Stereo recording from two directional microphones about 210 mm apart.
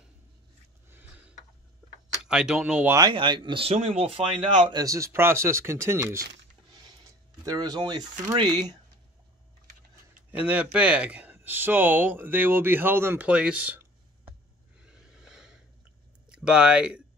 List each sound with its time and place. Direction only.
2.2 s speech: 5° right (ahead or behind)
3.0 s speech: 20° right (ahead or behind)
7.4 s speech: 20° right (ahead or behind)
10.3 s speech: 5° right (ahead or behind)
14.8 s snort: 5° right (ahead or behind)
16.3 s speech: 5° right (ahead or behind)